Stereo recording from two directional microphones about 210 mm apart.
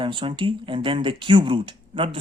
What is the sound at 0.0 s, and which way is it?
Speech, 25° right (ahead or behind).